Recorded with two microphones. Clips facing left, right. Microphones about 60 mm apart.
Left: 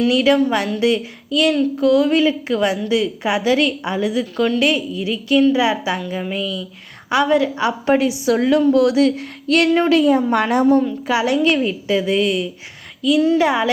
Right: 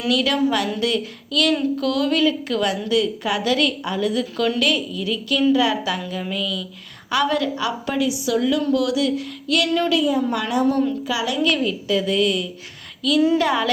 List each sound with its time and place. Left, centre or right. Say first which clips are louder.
0.1 s a woman's voice: left 4 dB; left
10.7 s a woman's voice: left 5 dB; centre
11.0 s a woman's voice: left 5 dB; left